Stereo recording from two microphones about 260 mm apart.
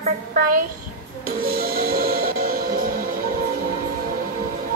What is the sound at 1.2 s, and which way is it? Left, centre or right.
Music, right.